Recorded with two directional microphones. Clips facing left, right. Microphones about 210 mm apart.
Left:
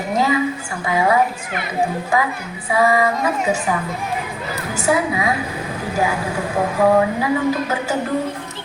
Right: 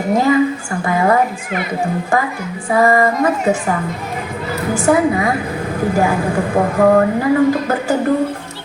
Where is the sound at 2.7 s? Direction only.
50° right (ahead or behind).